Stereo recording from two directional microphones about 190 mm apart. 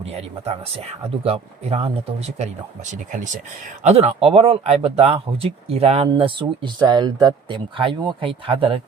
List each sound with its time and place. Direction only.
0.0 s speech: 35° right (ahead or behind)